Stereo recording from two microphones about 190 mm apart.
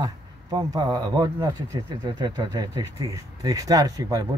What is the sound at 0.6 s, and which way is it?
Speech, 20° right (ahead or behind).